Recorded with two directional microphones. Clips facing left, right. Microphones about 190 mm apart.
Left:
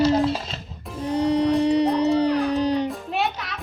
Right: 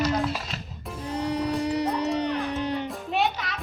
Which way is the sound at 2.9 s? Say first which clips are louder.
Left 1 dB; centre (ahead or behind).